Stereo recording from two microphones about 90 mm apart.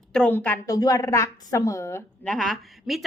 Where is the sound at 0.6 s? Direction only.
40° left (ahead or behind).